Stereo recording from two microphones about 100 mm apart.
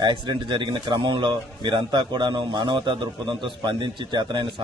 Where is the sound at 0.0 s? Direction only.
50° right (ahead or behind).